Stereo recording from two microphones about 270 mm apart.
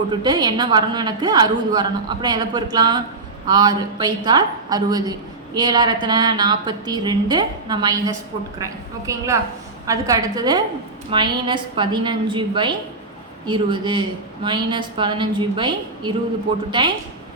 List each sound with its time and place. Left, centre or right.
0.1 s a woman's voice: centre